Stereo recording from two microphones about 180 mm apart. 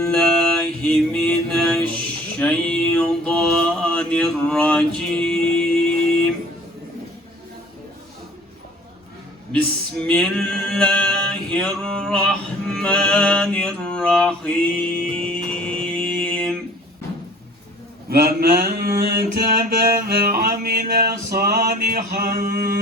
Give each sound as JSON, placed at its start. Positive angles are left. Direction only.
{"t": 0.0, "sound": "music", "side_deg": 5}
{"t": 2.4, "sound": "mantra", "side_deg": 5}
{"t": 9.5, "sound": "male singing", "side_deg": 5}
{"t": 15.6, "sound": "mantra", "side_deg": 5}
{"t": 18.1, "sound": "mantra", "side_deg": -55}